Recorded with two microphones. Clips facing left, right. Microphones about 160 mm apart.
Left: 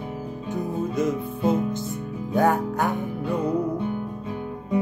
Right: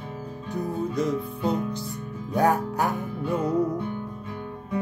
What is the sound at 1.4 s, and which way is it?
Music, 20° left (ahead or behind).